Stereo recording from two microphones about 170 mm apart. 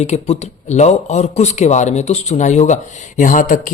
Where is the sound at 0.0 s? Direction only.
40° left (ahead or behind).